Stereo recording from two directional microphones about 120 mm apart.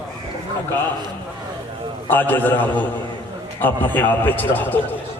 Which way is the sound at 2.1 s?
15° left (ahead or behind).